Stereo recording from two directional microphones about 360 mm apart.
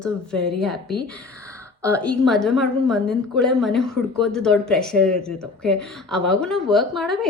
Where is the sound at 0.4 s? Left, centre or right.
Centre.